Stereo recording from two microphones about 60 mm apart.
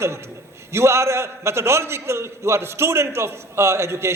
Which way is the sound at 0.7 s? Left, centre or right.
Right.